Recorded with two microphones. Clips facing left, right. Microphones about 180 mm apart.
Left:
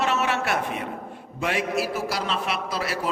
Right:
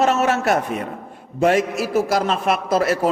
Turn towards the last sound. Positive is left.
turn(degrees=-45)  # may be behind; listen again after turning